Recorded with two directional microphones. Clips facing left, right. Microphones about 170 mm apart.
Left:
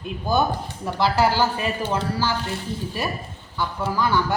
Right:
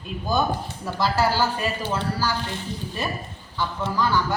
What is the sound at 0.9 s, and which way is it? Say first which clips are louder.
A woman's voice: left 2 dB; 15° left (ahead or behind).